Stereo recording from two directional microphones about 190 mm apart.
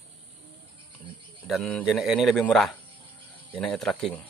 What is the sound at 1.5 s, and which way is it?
Speech, 5° left (ahead or behind).